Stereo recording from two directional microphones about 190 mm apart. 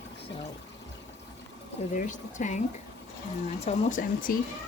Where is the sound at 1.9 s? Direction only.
40° left (ahead or behind).